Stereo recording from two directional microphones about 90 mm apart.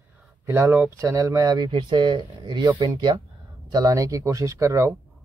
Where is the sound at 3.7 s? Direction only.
40° right (ahead or behind).